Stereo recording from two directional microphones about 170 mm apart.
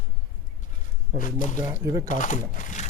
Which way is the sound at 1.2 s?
50° left (ahead or behind).